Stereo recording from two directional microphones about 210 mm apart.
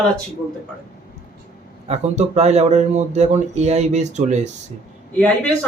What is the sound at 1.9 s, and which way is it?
A man's voice, 30° right (ahead or behind).